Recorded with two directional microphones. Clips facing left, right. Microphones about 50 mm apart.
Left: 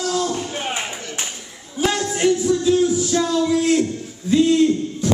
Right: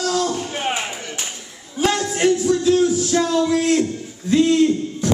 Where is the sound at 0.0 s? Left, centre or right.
Right.